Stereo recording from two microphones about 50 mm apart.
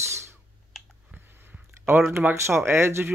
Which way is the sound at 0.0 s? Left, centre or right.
Right.